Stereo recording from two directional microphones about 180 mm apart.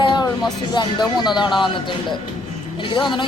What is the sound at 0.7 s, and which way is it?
Speech, 25° left (ahead or behind).